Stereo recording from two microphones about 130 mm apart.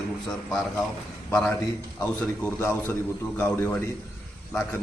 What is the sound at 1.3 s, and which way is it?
Speech, 5° left (ahead or behind).